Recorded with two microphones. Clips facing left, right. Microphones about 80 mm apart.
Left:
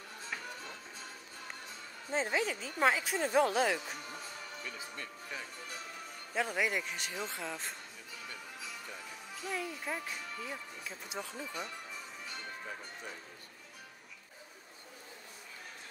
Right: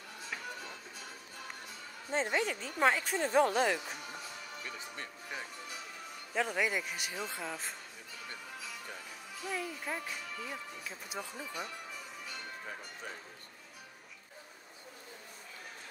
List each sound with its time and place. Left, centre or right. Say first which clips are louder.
2.0 s speech: right 1 dB; centre
4.6 s a man's voice: right 1 dB; right
6.3 s speech: right 1 dB; centre
9.5 s speech: even; centre
11.1 s speech: even; centre